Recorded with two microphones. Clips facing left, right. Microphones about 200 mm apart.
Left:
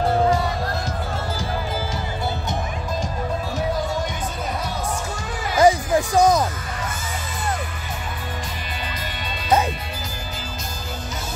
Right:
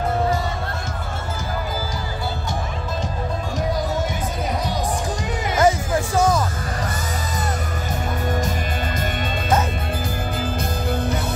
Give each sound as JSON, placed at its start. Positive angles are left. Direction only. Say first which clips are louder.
{"t": 5.6, "sound": "music", "louder": "left 3 dB", "side_deg": 15}